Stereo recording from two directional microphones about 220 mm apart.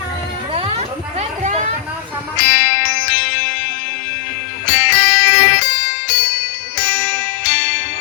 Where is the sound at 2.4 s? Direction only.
50° left (ahead or behind).